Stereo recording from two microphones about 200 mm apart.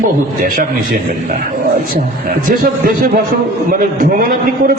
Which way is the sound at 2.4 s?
45° right (ahead or behind).